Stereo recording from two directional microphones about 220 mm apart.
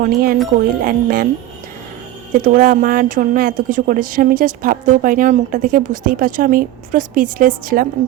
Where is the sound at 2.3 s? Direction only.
40° right (ahead or behind).